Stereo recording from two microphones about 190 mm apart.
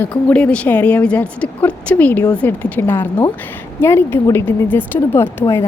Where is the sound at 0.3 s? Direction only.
5° left (ahead or behind).